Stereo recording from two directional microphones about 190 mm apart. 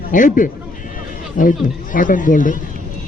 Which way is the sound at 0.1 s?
45° left (ahead or behind).